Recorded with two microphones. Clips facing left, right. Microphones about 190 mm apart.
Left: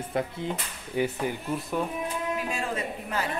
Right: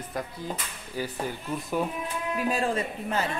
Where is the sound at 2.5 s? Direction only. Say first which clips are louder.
Right 4 dB; 30° right (ahead or behind).